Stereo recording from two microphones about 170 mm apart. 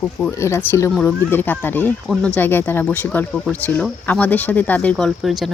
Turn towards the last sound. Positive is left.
turn(degrees=0)  # may be behind; listen again after turning